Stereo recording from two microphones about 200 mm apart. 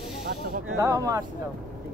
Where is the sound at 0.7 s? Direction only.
20° right (ahead or behind).